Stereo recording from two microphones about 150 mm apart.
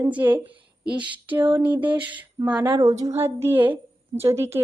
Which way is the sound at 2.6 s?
20° right (ahead or behind).